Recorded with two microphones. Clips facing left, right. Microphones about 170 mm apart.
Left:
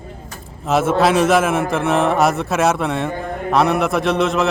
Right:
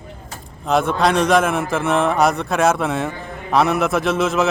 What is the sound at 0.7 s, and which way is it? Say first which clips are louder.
A man's voice: left 2 dB; 5° left (ahead or behind).